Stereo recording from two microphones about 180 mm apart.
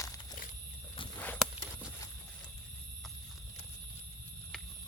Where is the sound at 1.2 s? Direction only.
10° left (ahead or behind).